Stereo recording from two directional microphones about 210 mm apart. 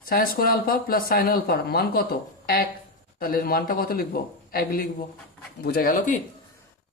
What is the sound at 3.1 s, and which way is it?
Speech, 45° left (ahead or behind).